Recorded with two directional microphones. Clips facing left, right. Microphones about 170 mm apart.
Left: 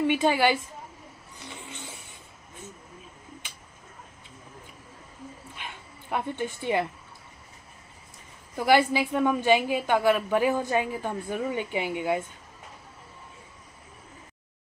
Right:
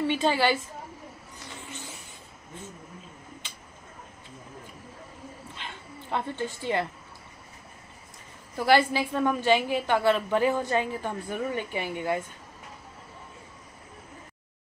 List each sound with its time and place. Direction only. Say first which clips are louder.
0.0 s a woman's voice: left 2 dB; 15° left (ahead or behind)
1.5 s a sound: even; 20° left (ahead or behind)
5.6 s dog: right 1 dB; 15° left (ahead or behind)
8.5 s a woman's voice: left 1 dB; 15° left (ahead or behind)